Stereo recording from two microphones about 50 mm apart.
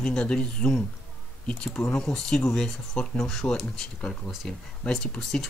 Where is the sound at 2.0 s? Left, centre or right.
Centre.